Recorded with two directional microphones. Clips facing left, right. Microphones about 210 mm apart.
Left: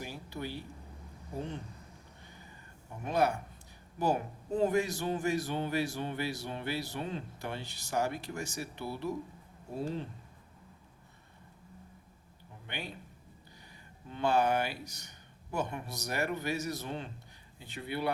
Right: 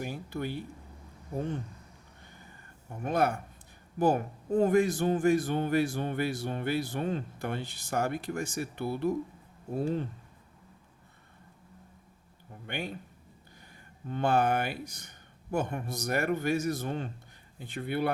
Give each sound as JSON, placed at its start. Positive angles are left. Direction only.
{"t": 0.0, "sound": "a sound", "side_deg": -50}
{"t": 3.0, "sound": "a man's voice", "side_deg": -50}
{"t": 12.6, "sound": "speech", "side_deg": -50}
{"t": 14.1, "sound": "a man's voice", "side_deg": -50}